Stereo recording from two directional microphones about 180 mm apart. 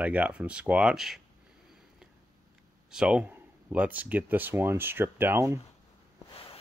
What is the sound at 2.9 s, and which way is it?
Speech, 5° right (ahead or behind).